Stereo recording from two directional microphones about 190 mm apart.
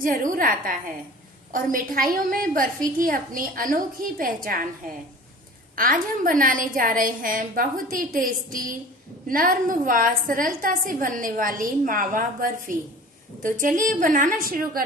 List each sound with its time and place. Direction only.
0.0 s a woman's voice: 45° right (ahead or behind)
5.8 s a woman's voice: 45° right (ahead or behind)